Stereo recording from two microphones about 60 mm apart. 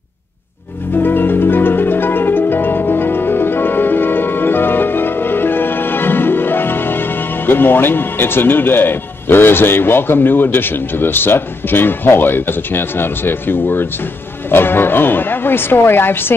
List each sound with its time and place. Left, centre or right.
0.9 s music: left
14.5 s speech: left